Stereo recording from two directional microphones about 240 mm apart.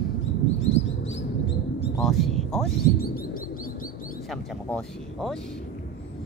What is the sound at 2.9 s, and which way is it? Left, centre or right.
Bird, left.